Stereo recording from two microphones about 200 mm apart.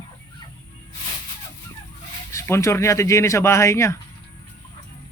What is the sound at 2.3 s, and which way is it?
Speech, 15° left (ahead or behind).